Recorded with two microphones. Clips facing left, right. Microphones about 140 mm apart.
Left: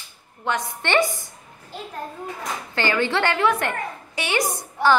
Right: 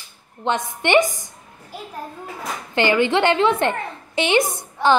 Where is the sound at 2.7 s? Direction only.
20° right (ahead or behind).